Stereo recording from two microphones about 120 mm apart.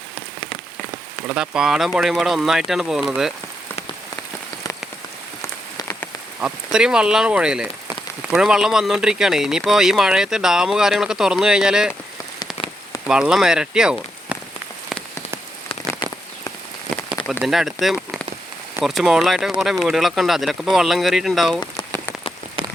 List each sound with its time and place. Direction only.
1.3 s speech: 5° right (ahead or behind)
5.4 s rain on surface: 25° left (ahead or behind)
6.4 s speech: 5° right (ahead or behind)
13.1 s speech: 5° right (ahead or behind)
17.4 s speech: 5° right (ahead or behind)